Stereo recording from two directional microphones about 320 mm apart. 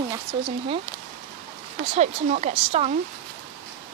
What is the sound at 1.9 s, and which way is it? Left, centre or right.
Speech, right.